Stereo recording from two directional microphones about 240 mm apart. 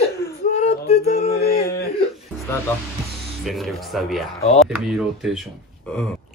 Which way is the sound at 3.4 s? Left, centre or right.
Centre.